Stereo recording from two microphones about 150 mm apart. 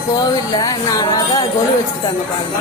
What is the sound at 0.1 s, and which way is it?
Speech, 25° left (ahead or behind).